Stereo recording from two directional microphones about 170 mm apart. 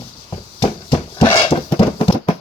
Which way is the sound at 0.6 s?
30° left (ahead or behind).